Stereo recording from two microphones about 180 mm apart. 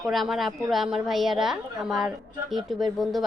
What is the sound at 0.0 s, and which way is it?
A woman's voice, centre (ahead or behind).